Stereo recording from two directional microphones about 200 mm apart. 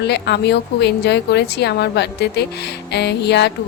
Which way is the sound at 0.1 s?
55° left (ahead or behind).